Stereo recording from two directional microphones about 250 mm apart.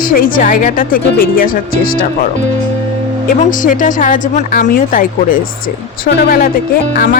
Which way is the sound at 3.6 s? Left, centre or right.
Left.